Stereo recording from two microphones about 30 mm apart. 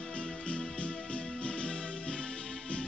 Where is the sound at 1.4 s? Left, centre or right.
Left.